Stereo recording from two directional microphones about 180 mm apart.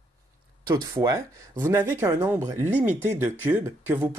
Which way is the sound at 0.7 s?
20° right (ahead or behind).